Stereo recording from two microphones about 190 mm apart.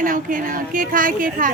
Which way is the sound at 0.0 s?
45° right (ahead or behind).